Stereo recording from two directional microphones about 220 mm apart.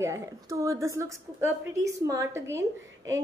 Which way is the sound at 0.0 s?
15° right (ahead or behind).